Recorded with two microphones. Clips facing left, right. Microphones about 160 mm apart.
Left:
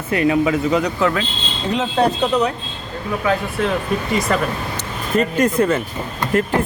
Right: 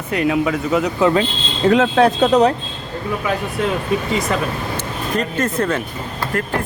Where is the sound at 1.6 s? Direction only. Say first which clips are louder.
Right 6 dB; 80° right.